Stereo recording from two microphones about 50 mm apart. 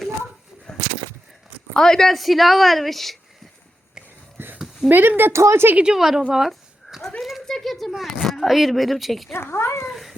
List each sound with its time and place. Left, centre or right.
0.7 s bird: centre
1.7 s a woman's voice: centre
4.9 s a woman's voice: right
5.3 s a woman's voice: right
5.8 s a woman's voice: centre
6.3 s a sound: centre
8.3 s a woman's voice: centre
9.3 s speech: left
9.9 s dog: centre